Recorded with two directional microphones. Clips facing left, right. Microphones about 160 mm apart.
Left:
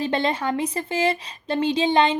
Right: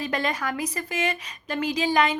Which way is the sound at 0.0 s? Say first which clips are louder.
Left 4 dB; 30° left (ahead or behind).